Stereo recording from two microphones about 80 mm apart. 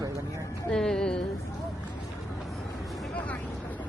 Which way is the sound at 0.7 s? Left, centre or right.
Centre.